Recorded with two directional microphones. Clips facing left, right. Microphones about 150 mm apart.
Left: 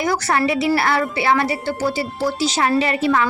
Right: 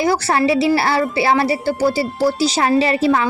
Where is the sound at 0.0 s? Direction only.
30° right (ahead or behind).